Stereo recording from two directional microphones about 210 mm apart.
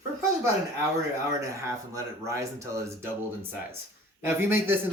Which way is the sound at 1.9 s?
15° right (ahead or behind).